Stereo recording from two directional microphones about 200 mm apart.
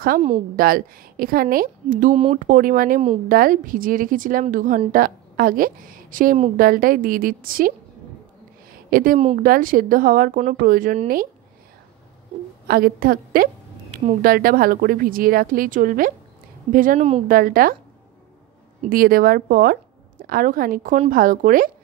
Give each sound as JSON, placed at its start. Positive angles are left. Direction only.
{"t": 0.6, "sound": "a woman's voice", "side_deg": -45}
{"t": 8.9, "sound": "a woman's voice", "side_deg": -45}
{"t": 12.6, "sound": "a woman's voice", "side_deg": -45}
{"t": 18.8, "sound": "a woman's voice", "side_deg": -45}